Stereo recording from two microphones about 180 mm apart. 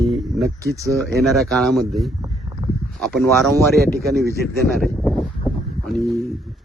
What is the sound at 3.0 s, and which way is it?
Speech, centre (ahead or behind).